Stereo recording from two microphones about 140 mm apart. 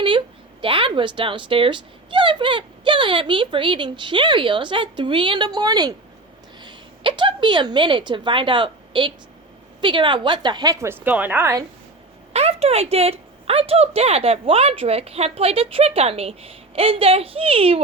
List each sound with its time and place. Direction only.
0.6 s a woman's voice: 35° right (ahead or behind); by 11.6 s 20° right (ahead or behind)
12.3 s a woman's voice: 45° right (ahead or behind)